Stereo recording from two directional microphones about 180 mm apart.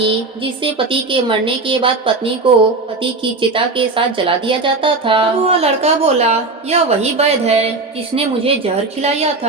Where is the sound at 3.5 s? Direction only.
30° right (ahead or behind).